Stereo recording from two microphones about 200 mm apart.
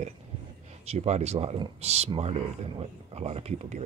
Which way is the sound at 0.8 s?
35° right (ahead or behind).